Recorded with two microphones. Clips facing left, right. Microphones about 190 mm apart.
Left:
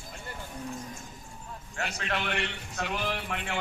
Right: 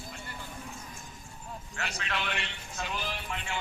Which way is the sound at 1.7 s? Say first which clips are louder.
Left 3 dB; 50° left (ahead or behind).